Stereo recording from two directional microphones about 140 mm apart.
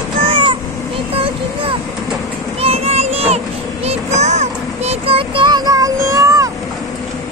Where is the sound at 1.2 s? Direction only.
40° right (ahead or behind).